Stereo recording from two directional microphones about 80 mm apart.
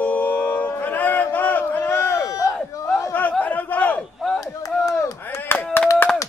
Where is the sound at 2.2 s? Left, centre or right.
Left.